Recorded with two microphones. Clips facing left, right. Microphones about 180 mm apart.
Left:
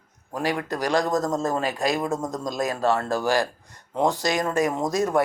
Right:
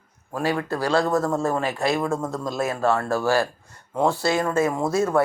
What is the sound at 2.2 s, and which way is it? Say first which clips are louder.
Speech: right 1 dB; 40° left (ahead or behind).